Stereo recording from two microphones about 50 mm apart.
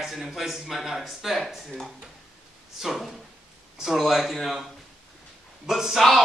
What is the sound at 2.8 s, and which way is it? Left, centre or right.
A man's voice, centre.